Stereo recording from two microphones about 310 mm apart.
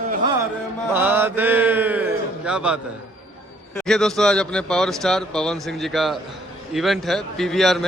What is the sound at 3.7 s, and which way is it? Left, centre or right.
A man's voice, centre.